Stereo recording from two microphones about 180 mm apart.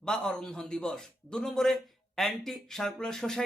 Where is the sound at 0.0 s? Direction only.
5° left (ahead or behind).